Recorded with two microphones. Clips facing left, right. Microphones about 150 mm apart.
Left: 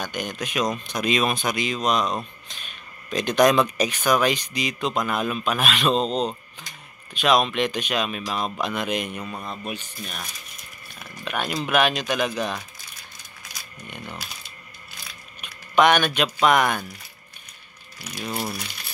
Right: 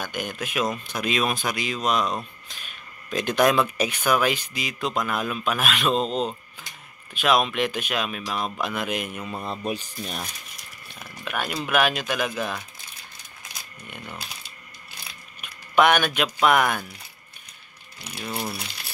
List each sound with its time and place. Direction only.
0.0 s speech: 5° right (ahead or behind)
9.5 s speech: 35° right (ahead or behind)
11.0 s speech: 5° right (ahead or behind)
13.8 s speech: 5° right (ahead or behind)
15.4 s speech: 5° right (ahead or behind)
18.1 s speech: 10° left (ahead or behind)